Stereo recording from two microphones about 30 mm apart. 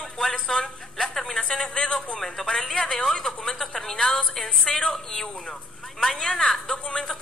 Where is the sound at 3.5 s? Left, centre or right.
Centre.